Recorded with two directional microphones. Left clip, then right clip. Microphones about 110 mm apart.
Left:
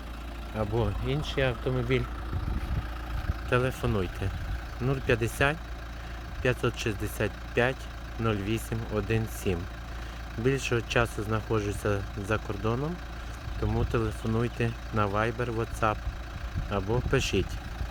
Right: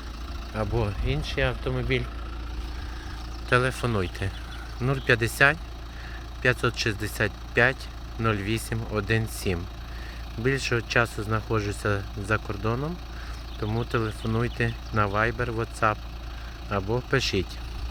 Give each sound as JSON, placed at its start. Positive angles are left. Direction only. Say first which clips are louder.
{"t": 0.5, "sound": "speech", "louder": "right 2 dB", "side_deg": -5}
{"t": 0.8, "sound": "speech", "louder": "right 1 dB", "side_deg": 15}
{"t": 3.5, "sound": "speech", "louder": "right 4 dB", "side_deg": -5}